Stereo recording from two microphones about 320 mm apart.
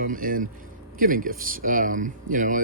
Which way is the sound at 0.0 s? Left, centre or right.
Right.